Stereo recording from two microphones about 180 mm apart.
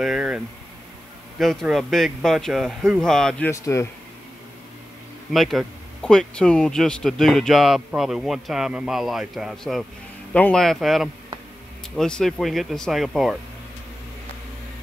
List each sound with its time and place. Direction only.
0.0 s a sound: 5° right (ahead or behind)
1.4 s speech: centre (ahead or behind); by 3.8 s 15° left (ahead or behind)
5.3 s speech: centre (ahead or behind)